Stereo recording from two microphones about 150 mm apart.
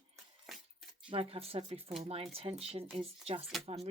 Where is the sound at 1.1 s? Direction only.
40° right (ahead or behind).